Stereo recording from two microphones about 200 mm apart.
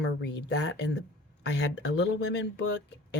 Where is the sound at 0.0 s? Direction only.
60° left (ahead or behind).